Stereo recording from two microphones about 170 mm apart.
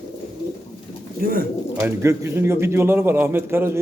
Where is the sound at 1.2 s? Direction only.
60° right (ahead or behind).